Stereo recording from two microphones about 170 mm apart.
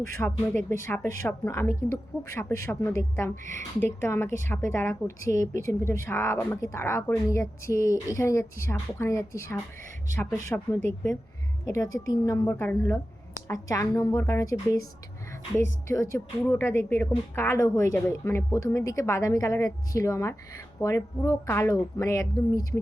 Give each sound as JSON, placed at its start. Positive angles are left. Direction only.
{"t": 0.2, "sound": "a woman's voice", "side_deg": 10}